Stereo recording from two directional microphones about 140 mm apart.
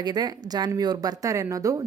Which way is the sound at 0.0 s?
30° right (ahead or behind).